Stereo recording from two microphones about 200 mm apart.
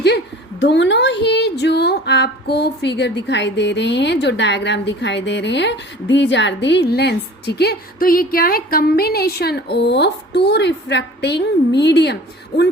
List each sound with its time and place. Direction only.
0.6 s speech: 60° left (ahead or behind)